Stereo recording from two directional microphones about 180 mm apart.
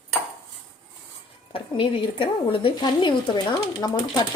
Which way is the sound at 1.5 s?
30° left (ahead or behind).